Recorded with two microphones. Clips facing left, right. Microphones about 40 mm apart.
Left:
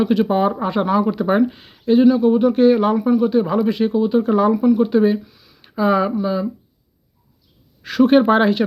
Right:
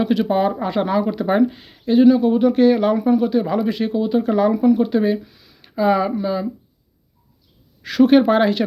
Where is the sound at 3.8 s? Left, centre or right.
Centre.